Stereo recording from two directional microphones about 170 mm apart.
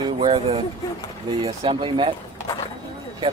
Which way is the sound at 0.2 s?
30° right (ahead or behind).